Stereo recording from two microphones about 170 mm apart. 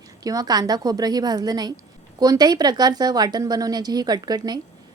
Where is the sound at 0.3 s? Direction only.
20° right (ahead or behind).